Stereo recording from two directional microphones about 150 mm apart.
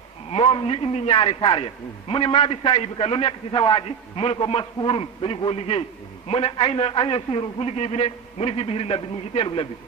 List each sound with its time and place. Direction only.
0.3 s a man's voice: 40° left (ahead or behind)